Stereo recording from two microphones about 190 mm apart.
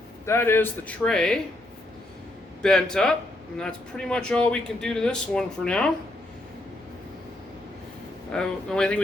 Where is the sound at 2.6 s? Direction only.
5° left (ahead or behind).